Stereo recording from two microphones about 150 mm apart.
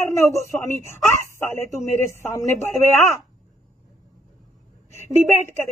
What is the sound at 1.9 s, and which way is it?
Speech, 15° left (ahead or behind).